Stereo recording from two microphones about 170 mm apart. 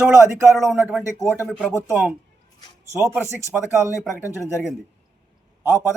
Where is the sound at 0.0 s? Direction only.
15° right (ahead or behind).